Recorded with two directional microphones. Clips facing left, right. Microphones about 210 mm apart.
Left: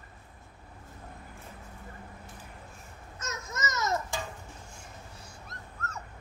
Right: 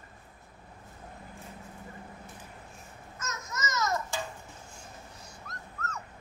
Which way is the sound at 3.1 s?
30° left (ahead or behind).